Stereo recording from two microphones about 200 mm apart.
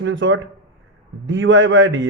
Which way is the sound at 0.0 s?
70° right (ahead or behind).